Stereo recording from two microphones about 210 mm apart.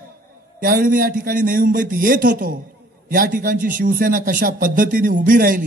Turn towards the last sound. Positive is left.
turn(degrees=-40)  # may be behind; listen again after turning